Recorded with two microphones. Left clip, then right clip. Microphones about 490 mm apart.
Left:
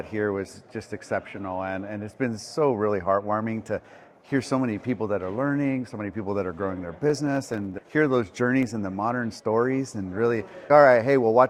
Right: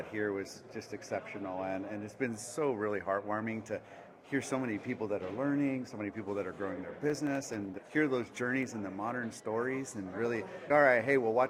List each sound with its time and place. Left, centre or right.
0.1 s speech: left